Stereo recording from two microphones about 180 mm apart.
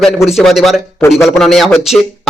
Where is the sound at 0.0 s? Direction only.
Centre (ahead or behind).